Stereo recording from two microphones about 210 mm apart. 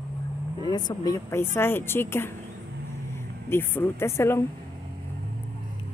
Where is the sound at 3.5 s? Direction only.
10° left (ahead or behind).